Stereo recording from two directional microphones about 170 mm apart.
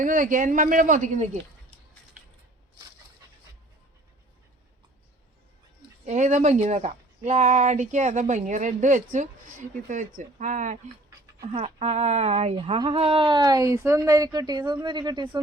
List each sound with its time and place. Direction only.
0.0 s speech: 50° right (ahead or behind)
6.1 s speech: 45° right (ahead or behind)
11.5 s a woman's voice: 35° right (ahead or behind)